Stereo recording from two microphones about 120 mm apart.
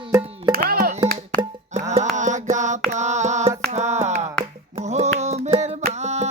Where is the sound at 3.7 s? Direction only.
65° right (ahead or behind).